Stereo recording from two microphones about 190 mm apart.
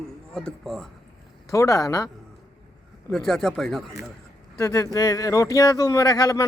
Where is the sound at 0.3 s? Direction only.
Centre (ahead or behind).